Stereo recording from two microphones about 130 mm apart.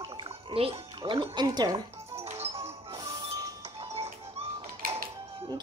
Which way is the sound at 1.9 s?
50° right (ahead or behind).